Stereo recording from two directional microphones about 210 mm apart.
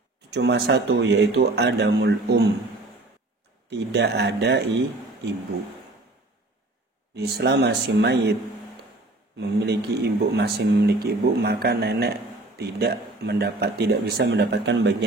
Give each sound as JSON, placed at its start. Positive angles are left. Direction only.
{"t": 0.3, "sound": "speech", "side_deg": -55}
{"t": 3.7, "sound": "speech", "side_deg": -55}
{"t": 7.2, "sound": "speech", "side_deg": -50}
{"t": 9.4, "sound": "speech", "side_deg": -50}